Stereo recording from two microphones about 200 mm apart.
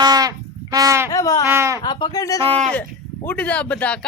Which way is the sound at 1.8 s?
20° left (ahead or behind).